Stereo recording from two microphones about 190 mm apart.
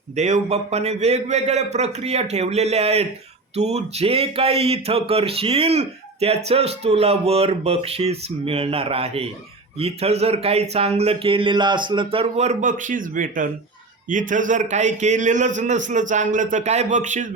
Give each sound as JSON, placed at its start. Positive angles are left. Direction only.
{"t": 0.2, "sound": "speech", "side_deg": -40}